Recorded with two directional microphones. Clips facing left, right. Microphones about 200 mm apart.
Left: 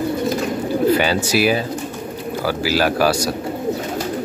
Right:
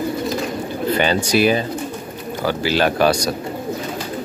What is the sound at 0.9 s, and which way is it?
Speech, 5° left (ahead or behind).